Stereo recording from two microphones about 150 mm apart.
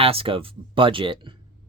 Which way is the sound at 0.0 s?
40° right (ahead or behind).